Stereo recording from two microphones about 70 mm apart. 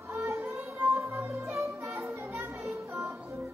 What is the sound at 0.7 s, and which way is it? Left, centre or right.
Music, right.